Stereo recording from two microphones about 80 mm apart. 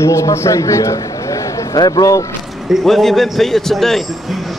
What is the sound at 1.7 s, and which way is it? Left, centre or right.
Speech, left.